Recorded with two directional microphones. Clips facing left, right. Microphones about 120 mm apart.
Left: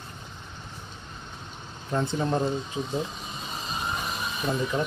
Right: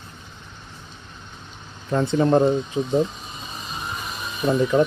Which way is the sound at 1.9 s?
85° right.